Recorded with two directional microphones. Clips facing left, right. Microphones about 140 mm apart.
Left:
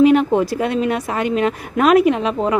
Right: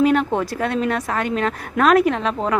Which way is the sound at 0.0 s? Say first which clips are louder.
Left 5 dB; 5° left (ahead or behind).